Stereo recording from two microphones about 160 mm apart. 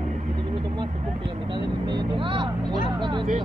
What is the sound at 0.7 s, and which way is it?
Vehicle, 30° right (ahead or behind).